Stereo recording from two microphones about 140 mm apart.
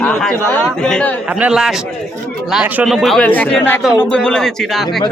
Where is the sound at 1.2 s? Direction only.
10° right (ahead or behind).